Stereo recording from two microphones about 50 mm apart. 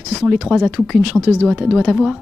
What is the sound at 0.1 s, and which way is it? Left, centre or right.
A man's voice, centre.